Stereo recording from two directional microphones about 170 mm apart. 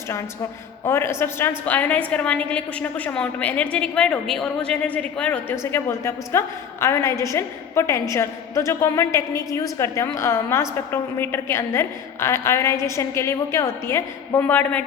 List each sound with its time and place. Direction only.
0.9 s a woman's voice: 15° left (ahead or behind)